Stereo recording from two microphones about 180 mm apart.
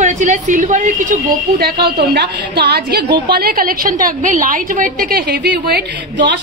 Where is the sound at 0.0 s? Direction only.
45° right (ahead or behind).